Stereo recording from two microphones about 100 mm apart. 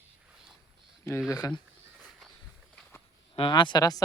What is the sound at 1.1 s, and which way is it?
Speech, 30° left (ahead or behind).